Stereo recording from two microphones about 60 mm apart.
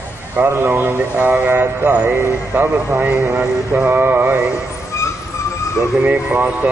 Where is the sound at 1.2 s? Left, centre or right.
Right.